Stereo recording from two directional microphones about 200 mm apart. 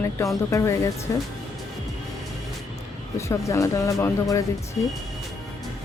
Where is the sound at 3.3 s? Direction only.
15° left (ahead or behind).